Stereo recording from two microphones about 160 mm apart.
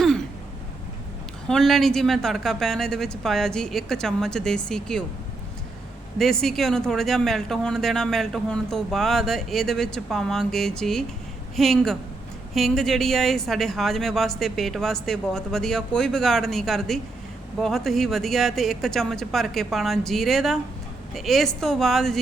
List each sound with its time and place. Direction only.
1.5 s speech: 5° left (ahead or behind)
6.1 s speech: centre (ahead or behind)